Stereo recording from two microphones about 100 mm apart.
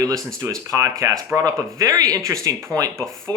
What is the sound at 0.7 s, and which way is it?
Speech, 30° right (ahead or behind).